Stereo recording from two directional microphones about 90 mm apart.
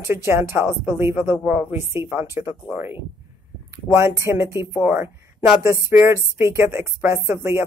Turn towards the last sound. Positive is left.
turn(degrees=-30)  # may be behind; listen again after turning